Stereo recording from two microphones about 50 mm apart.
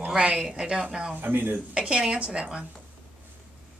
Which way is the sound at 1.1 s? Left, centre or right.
Right.